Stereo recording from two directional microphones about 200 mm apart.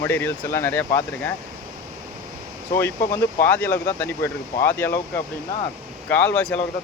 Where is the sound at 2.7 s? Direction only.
10° left (ahead or behind).